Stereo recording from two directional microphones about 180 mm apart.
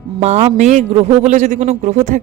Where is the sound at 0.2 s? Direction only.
40° right (ahead or behind).